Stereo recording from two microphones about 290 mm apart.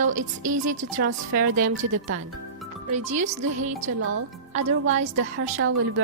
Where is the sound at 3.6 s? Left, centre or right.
Right.